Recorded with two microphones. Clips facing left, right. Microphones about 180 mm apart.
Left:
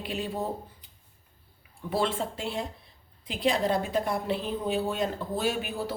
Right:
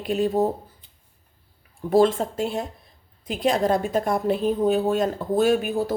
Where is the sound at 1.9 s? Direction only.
45° right (ahead or behind).